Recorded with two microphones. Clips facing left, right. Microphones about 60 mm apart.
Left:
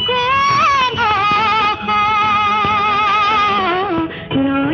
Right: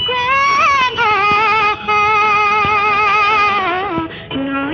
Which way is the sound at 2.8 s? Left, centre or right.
Right.